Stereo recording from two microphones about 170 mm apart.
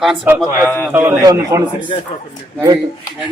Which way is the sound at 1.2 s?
20° right (ahead or behind).